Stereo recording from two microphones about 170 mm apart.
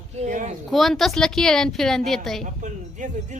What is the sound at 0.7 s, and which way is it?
A woman's voice, centre (ahead or behind).